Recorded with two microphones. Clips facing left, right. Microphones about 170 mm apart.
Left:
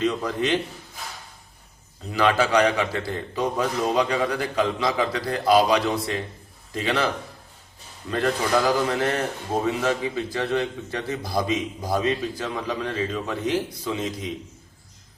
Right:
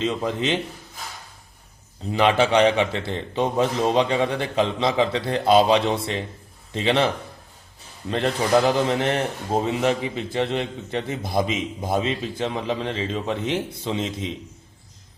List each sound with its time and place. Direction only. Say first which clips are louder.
0.0 s a man's voice: even; 25° right (ahead or behind)
2.1 s a man's voice: right 2 dB; 25° right (ahead or behind)
8.1 s a man's voice: right 2 dB; 25° right (ahead or behind)